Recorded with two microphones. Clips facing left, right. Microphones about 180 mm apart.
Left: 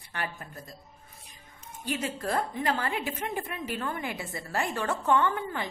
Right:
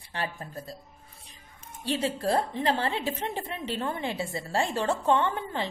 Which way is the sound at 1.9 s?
35° right (ahead or behind).